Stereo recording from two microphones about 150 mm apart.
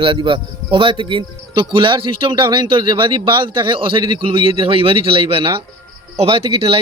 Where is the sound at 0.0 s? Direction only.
35° right (ahead or behind).